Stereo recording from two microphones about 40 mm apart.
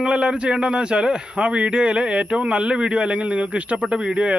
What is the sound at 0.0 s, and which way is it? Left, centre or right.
A man's voice, right.